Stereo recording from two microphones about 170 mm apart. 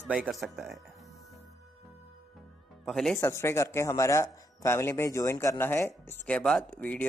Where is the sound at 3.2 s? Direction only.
15° left (ahead or behind).